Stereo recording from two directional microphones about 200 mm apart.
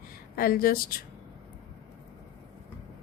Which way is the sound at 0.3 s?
45° left (ahead or behind).